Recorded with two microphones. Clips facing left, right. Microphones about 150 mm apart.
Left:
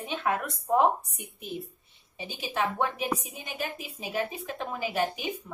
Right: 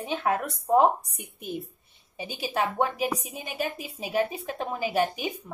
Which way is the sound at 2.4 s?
35° right (ahead or behind).